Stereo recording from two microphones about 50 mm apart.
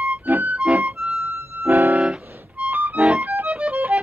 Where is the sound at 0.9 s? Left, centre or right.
Centre.